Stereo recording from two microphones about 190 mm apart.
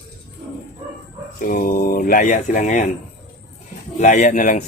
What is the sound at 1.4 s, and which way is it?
Speech, 45° left (ahead or behind).